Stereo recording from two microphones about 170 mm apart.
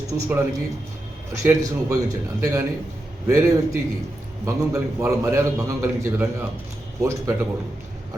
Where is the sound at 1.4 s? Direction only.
20° right (ahead or behind).